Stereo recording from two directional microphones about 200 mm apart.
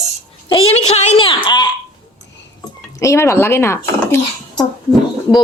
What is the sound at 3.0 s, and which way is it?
Speech, 15° left (ahead or behind).